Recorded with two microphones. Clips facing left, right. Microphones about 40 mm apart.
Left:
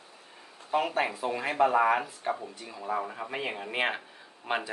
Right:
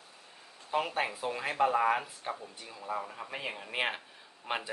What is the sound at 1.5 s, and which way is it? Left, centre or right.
Speech, left.